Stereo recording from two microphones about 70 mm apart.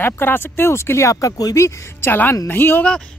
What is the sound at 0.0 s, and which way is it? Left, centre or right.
Speech, left.